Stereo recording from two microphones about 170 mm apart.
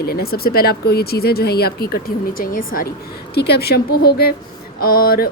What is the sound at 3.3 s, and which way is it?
A woman's voice, 70° left (ahead or behind).